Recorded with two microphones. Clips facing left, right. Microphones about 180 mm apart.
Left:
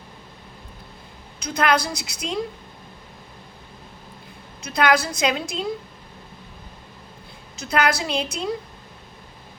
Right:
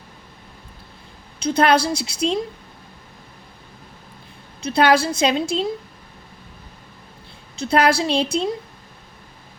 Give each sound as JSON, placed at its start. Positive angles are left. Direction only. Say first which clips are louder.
{"t": 1.4, "sound": "a woman's voice", "louder": "right 5 dB", "side_deg": -30}
{"t": 4.6, "sound": "a woman's voice", "louder": "right 4 dB", "side_deg": -30}
{"t": 7.5, "sound": "a woman's voice", "louder": "right 5 dB", "side_deg": -30}